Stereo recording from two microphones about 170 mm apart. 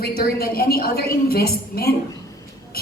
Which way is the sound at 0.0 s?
65° left (ahead or behind).